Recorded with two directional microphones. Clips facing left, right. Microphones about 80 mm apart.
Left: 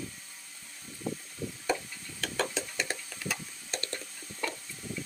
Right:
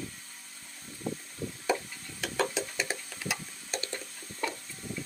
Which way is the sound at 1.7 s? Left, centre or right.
Centre.